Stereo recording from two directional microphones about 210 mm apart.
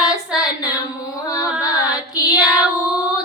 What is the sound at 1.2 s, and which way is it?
Music, 15° left (ahead or behind).